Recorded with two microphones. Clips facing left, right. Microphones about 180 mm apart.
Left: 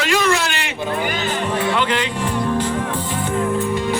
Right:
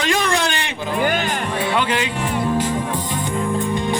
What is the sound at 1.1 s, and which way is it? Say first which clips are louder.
Speech: even; 50° right (ahead or behind).